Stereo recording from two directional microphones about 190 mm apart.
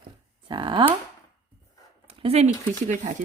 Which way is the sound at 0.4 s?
25° right (ahead or behind).